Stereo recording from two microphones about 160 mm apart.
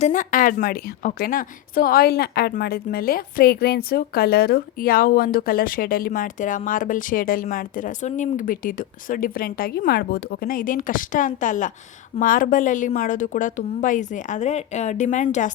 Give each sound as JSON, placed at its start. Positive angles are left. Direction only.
{"t": 0.0, "sound": "a woman's voice", "side_deg": 55}